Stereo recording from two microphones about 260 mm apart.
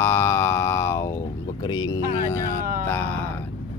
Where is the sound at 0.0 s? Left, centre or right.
Centre.